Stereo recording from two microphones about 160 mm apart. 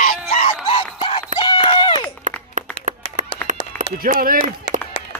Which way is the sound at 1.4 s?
30° left (ahead or behind).